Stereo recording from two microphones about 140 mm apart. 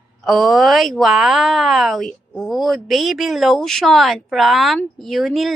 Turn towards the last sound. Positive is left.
turn(degrees=0)  # may be behind; listen again after turning